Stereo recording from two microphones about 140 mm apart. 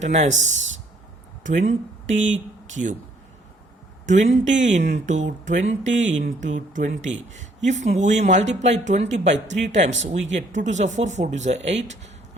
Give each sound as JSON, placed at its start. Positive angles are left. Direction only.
{"t": 0.0, "sound": "speech", "side_deg": -55}
{"t": 4.0, "sound": "speech", "side_deg": -60}